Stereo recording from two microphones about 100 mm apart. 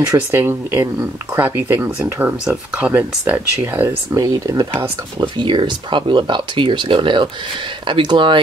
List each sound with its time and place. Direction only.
0.3 s speech: 20° right (ahead or behind)
4.2 s speech: 35° right (ahead or behind)
5.2 s speech: 55° right (ahead or behind)